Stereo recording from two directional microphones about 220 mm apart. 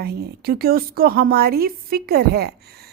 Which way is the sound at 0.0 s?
45° right (ahead or behind).